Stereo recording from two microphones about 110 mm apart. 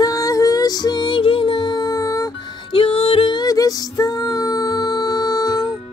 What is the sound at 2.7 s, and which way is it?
Music, 60° left (ahead or behind).